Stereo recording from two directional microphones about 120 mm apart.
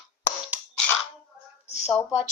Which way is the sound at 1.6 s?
60° left (ahead or behind).